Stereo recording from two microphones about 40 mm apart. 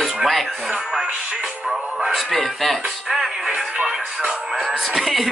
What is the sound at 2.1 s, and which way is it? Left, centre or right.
Speech, centre.